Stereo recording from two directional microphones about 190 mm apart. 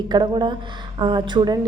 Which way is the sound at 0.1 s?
25° right (ahead or behind).